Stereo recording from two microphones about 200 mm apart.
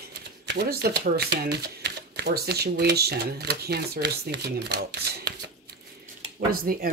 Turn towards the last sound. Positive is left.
turn(degrees=-45)  # may be behind; listen again after turning